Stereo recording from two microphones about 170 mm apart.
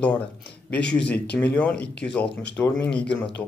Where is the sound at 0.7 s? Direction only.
90° left.